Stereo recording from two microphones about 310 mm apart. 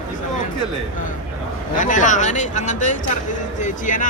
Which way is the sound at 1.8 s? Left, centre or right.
Left.